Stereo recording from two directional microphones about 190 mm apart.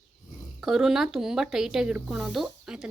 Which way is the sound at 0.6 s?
5° right (ahead or behind).